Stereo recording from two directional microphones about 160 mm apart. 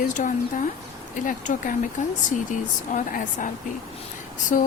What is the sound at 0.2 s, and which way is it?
Speech, 50° left (ahead or behind).